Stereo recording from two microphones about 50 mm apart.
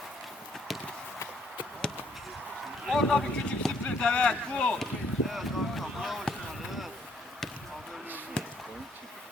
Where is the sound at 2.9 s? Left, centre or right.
Centre.